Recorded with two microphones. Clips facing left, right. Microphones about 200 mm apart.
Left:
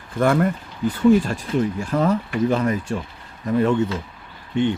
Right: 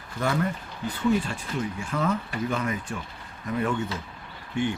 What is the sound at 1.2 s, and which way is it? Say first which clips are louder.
Speech: left 9 dB; 40° left (ahead or behind).